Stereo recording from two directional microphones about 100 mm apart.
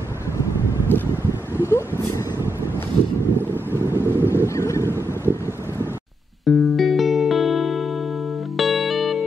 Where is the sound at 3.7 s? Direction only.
25° right (ahead or behind).